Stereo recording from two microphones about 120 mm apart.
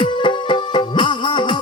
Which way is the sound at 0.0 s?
40° left (ahead or behind).